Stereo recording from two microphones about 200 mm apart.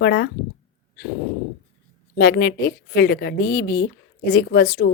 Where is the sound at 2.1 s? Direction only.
55° left (ahead or behind).